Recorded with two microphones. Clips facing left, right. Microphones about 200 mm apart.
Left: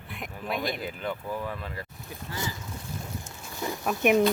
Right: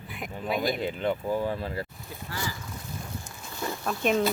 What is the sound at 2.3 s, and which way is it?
Boat, 20° left (ahead or behind).